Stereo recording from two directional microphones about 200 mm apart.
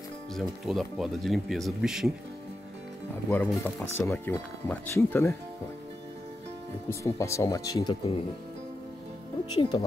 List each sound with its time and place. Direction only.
0.3 s speech: centre (ahead or behind)
3.3 s speech: 10° left (ahead or behind)
6.9 s speech: 15° left (ahead or behind)
9.6 s speech: 20° left (ahead or behind)